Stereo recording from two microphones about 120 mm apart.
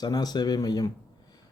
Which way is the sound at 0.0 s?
35° left (ahead or behind).